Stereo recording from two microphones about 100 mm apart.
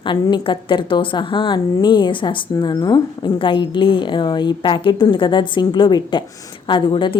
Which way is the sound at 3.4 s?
55° left (ahead or behind).